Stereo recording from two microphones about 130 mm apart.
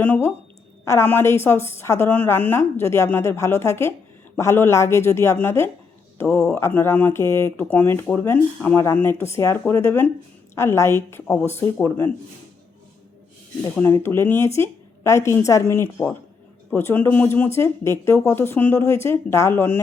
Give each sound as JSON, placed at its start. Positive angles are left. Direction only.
{"t": 0.0, "sound": "speech", "side_deg": 15}
{"t": 13.8, "sound": "speech", "side_deg": 20}